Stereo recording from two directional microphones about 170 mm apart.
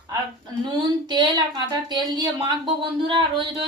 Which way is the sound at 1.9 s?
25° right (ahead or behind).